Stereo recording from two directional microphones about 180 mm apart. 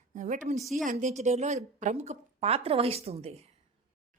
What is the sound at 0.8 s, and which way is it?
A woman's voice, 45° right (ahead or behind).